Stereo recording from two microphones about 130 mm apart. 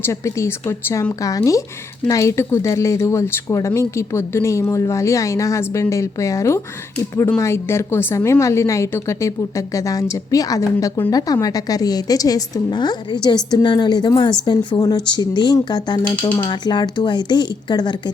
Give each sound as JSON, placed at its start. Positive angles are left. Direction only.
{"t": 0.0, "sound": "a woman's voice", "side_deg": 20}